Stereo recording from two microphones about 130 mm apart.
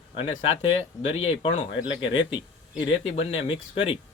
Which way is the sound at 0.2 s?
55° left (ahead or behind).